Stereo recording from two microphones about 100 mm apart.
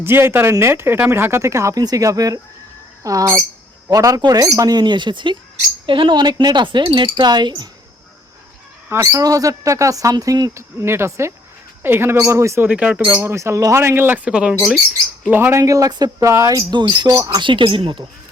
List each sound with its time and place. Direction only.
0.0 s speech: 25° right (ahead or behind); by 7.7 s 45° right (ahead or behind)
9.0 s speech: 35° right (ahead or behind)
10.5 s speech: 25° right (ahead or behind)
12.6 s speech: 10° right (ahead or behind)
13.1 s speech: 30° right (ahead or behind)
14.3 s speech: 10° right (ahead or behind)
15.3 s speech: 20° right (ahead or behind)
15.6 s speech: 35° right (ahead or behind)
16.2 s speech: 30° right (ahead or behind); by 18.0 s 65° right (ahead or behind)